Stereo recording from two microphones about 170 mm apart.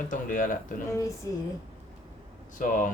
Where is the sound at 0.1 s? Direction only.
50° left (ahead or behind).